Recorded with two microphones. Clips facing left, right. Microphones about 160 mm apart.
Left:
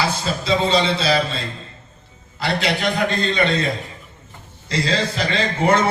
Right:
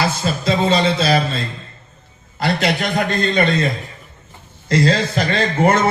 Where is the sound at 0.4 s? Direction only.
45° right (ahead or behind).